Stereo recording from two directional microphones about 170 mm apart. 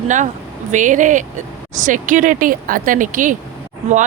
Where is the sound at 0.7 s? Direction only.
50° right (ahead or behind).